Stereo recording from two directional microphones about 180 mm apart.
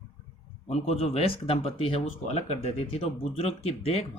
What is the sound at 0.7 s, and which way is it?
Speech, 35° left (ahead or behind).